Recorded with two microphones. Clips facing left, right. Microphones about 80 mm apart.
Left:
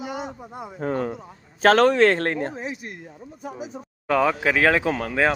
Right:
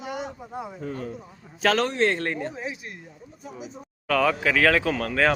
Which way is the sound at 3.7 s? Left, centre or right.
Left.